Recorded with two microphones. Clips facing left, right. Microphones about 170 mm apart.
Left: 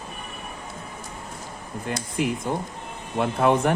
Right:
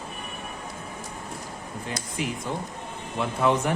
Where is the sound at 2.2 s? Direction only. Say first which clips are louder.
Left 5 dB; 50° left (ahead or behind).